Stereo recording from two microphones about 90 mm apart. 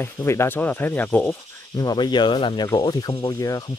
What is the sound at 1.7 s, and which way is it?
Speech, 50° left (ahead or behind).